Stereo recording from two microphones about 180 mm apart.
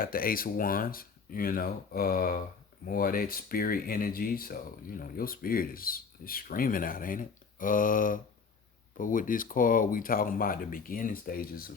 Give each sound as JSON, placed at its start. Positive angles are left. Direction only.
{"t": 0.0, "sound": "speech", "side_deg": 55}